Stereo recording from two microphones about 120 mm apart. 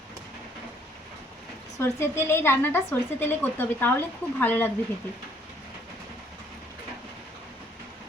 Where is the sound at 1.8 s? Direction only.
20° left (ahead or behind).